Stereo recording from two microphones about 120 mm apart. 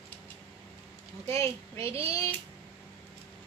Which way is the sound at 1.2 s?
25° left (ahead or behind).